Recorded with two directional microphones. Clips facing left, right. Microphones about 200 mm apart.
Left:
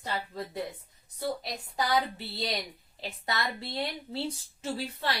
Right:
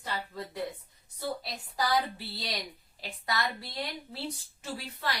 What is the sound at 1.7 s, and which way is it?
Speech, 25° left (ahead or behind).